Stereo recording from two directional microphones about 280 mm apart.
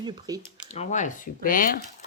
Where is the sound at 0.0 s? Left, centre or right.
Centre.